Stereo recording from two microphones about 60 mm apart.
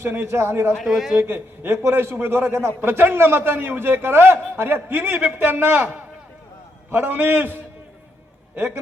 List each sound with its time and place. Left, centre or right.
0.0 s a man's voice: right
0.9 s a man's voice: centre
1.2 s a man's voice: right
6.9 s a man's voice: right